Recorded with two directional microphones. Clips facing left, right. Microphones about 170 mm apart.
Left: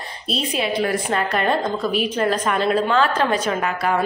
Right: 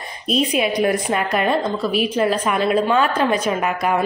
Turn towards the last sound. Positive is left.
turn(degrees=-15)  # may be behind; listen again after turning